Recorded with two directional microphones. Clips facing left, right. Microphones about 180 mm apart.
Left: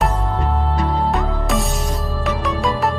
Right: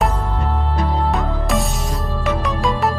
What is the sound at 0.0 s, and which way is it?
Music, centre (ahead or behind).